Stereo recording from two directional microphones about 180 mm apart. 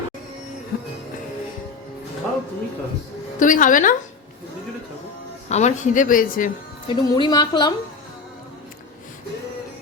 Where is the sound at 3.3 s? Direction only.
45° left (ahead or behind).